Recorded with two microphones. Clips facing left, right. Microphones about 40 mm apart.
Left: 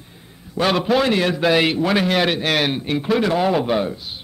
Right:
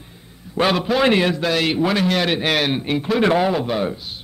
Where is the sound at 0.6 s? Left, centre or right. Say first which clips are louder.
Left 1 dB; centre.